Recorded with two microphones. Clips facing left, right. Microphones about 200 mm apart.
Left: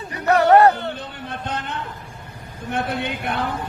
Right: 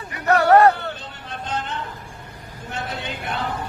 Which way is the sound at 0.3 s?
20° left (ahead or behind).